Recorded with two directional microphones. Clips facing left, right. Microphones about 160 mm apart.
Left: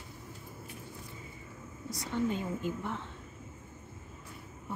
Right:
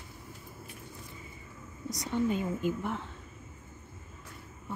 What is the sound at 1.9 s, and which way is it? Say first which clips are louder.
A woman's voice: right 2 dB; 15° right (ahead or behind).